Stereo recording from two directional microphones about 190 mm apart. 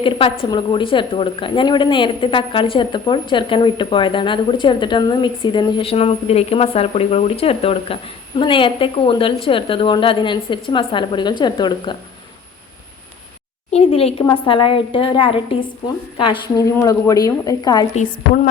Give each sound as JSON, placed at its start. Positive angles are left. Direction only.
{"t": 0.0, "sound": "a woman's voice", "side_deg": 30}
{"t": 13.7, "sound": "a woman's voice", "side_deg": 30}